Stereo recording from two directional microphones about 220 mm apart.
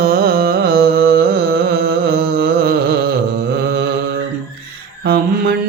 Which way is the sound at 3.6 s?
50° right (ahead or behind).